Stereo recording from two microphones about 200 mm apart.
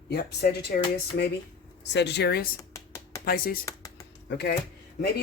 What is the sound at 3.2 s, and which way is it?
Speech, 45° left (ahead or behind).